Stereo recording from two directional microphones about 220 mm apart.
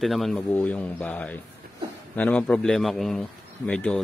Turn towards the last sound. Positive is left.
turn(degrees=5)  # may be behind; listen again after turning